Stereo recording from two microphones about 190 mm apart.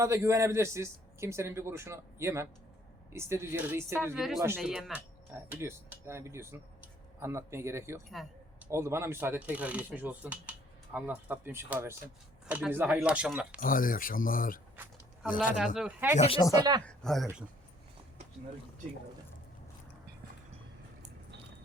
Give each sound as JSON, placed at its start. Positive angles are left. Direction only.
{"t": 0.0, "sound": "speech", "side_deg": -15}
{"t": 13.6, "sound": "speech", "side_deg": 45}
{"t": 15.5, "sound": "speech", "side_deg": 0}
{"t": 16.1, "sound": "speech", "side_deg": 35}
{"t": 16.8, "sound": "speech", "side_deg": 0}